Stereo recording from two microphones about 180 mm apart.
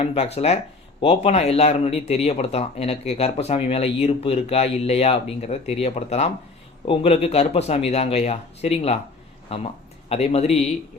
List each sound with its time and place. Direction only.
0.0 s speech: 35° left (ahead or behind)